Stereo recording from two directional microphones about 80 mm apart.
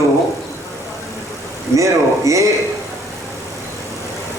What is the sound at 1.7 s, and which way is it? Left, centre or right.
Speech, right.